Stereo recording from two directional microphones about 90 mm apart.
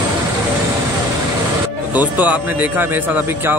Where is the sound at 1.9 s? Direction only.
15° right (ahead or behind).